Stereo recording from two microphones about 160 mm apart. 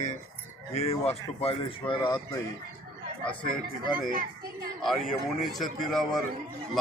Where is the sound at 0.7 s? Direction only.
40° left (ahead or behind).